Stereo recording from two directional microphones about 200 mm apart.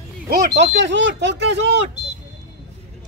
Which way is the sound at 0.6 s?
65° right (ahead or behind).